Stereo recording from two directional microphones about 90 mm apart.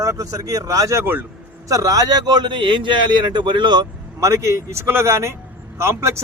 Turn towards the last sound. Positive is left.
turn(degrees=-30)  # may be behind; listen again after turning